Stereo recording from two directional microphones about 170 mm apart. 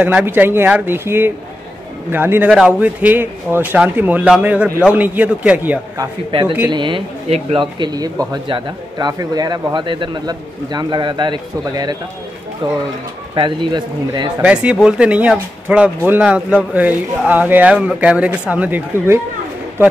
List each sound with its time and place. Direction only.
0.0 s speech: 10° right (ahead or behind)
5.9 s speech: 30° right (ahead or behind)
13.3 s speech: 30° right (ahead or behind)
14.4 s speech: 5° right (ahead or behind)